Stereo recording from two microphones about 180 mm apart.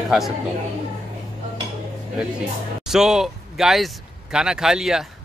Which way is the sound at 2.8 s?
5° right (ahead or behind).